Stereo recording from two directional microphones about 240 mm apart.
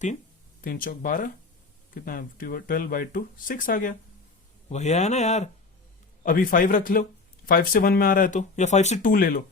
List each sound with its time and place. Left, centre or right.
0.6 s speech: left